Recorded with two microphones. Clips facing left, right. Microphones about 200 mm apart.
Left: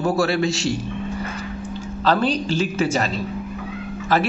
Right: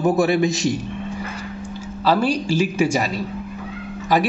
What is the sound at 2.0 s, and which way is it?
A man's voice, 10° right (ahead or behind).